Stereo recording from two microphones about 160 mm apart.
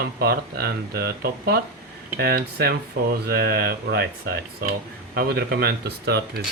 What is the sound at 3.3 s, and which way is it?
Speech, 75° right (ahead or behind).